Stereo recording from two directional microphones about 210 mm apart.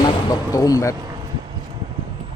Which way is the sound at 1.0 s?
20° right (ahead or behind).